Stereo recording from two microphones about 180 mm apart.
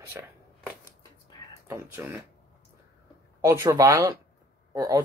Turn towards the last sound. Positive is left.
turn(degrees=-20)  # may be behind; listen again after turning